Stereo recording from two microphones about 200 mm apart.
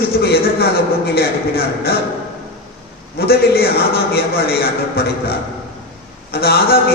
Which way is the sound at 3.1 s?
50° left (ahead or behind).